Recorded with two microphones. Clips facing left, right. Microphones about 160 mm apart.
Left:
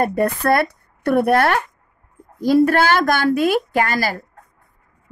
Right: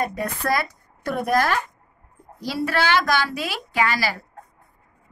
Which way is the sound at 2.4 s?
50° left (ahead or behind).